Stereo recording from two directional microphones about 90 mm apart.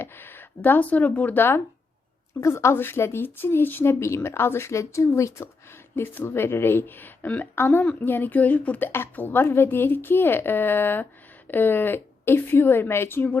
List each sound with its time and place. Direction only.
0.0 s a woman's voice: 25° left (ahead or behind)